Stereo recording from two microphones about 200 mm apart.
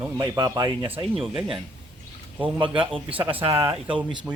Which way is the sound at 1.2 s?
Centre (ahead or behind).